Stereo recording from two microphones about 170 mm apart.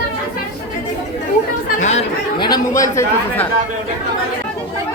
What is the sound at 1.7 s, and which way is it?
Speech, 40° left (ahead or behind).